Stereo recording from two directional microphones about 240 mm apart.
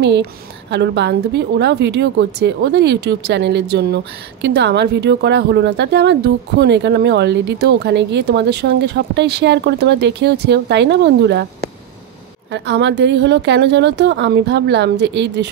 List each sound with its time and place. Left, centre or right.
0.0 s a woman's voice: right
12.5 s a woman's voice: right